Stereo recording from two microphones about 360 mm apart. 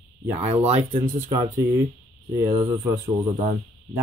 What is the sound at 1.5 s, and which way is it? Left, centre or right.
Speech, centre.